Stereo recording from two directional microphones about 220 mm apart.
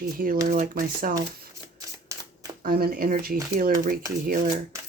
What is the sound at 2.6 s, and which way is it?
Speech, 45° right (ahead or behind).